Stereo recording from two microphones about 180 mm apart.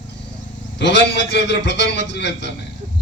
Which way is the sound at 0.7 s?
75° left (ahead or behind).